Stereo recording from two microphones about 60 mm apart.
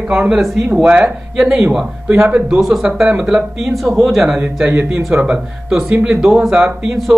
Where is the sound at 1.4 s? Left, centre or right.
Centre.